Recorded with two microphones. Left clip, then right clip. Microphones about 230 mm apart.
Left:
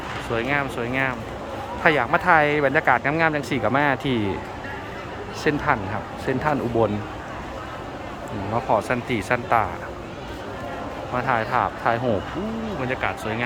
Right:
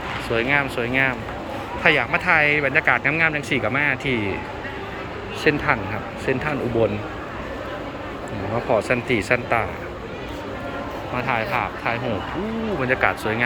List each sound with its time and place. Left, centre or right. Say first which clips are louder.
0.3 s speech: right 3 dB; centre
5.4 s speech: right 2 dB; centre
8.7 s speech: right 3 dB; centre
11.2 s speech: left 1 dB; left
12.9 s speech: right 6 dB; centre